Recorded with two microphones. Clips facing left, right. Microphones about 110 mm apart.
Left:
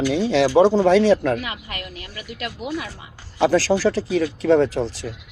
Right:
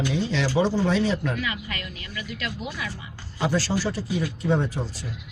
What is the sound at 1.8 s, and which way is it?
Speech, 35° left (ahead or behind).